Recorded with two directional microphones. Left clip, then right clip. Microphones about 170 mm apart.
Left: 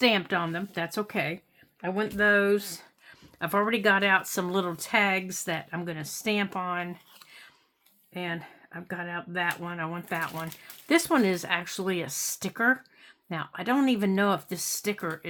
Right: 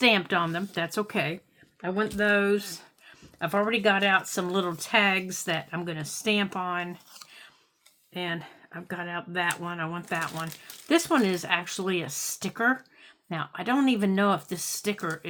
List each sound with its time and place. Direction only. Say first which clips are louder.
0.0 s speech: right 2 dB; 10° left (ahead or behind)
8.1 s speech: right 2 dB; 20° left (ahead or behind)